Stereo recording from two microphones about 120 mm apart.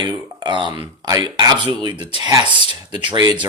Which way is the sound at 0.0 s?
40° right (ahead or behind).